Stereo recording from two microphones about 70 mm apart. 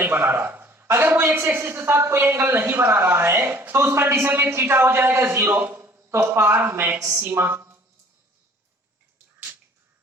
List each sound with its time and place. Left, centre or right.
0.0 s a man's voice: right